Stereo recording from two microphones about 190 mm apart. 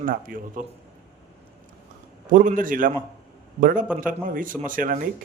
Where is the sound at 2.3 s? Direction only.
45° right (ahead or behind).